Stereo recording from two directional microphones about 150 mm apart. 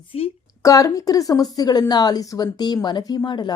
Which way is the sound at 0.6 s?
25° left (ahead or behind).